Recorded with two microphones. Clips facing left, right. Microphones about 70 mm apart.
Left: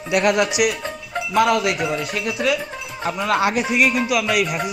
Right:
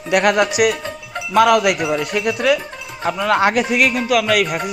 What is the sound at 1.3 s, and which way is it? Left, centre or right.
Speech, right.